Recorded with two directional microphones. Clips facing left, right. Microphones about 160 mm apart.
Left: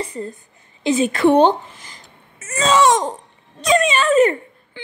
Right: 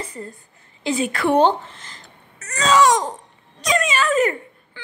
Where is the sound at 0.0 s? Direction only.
30° left (ahead or behind).